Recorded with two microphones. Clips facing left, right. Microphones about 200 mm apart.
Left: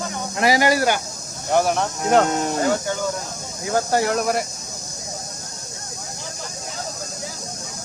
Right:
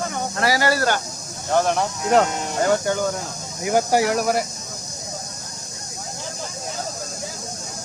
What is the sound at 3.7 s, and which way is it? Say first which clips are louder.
Speech: right 2 dB; 15° right (ahead or behind).